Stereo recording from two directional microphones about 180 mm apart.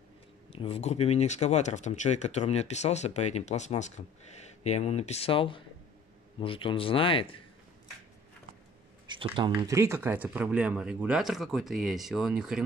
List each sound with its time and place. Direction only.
0.5 s speech: 30° left (ahead or behind)
9.2 s speech: 30° right (ahead or behind)
9.6 s speech: 15° right (ahead or behind)